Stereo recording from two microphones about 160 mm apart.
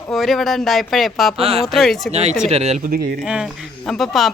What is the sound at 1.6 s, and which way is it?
Speech, centre (ahead or behind).